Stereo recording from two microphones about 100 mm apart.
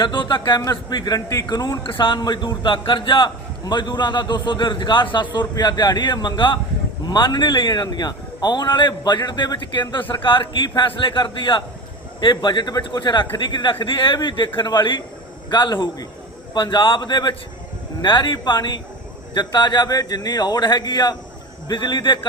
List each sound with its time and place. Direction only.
0.0 s a man's voice: 50° left (ahead or behind)
0.6 s a man's voice: 40° left (ahead or behind)
1.8 s a man's voice: 55° left (ahead or behind)